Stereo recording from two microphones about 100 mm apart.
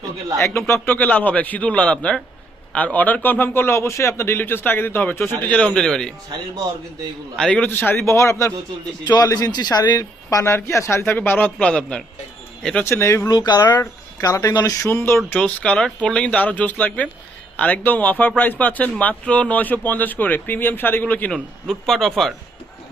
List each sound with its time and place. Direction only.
0.3 s speech: 25° left (ahead or behind); by 6.1 s 5° left (ahead or behind)
7.3 s speech: 10° left (ahead or behind)
7.7 s speech: 20° left (ahead or behind); by 10.1 s 45° left (ahead or behind)
10.2 s speech: 30° left (ahead or behind)
11.0 s speech: 15° left (ahead or behind)
12.8 s speech: 25° left (ahead or behind)
13.3 s speech: 45° left (ahead or behind)
14.8 s speech: 25° left (ahead or behind)
21.3 s speech: centre (ahead or behind)